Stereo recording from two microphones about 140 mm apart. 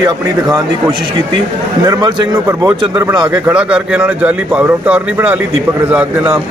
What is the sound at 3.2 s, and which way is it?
A man's voice, 10° right (ahead or behind).